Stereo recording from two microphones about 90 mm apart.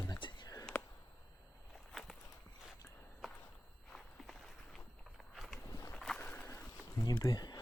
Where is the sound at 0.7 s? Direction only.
20° left (ahead or behind).